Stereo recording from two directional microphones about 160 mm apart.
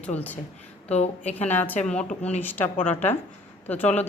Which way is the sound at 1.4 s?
10° left (ahead or behind).